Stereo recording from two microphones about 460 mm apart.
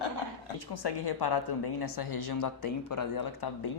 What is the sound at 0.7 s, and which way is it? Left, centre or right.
Speech, left.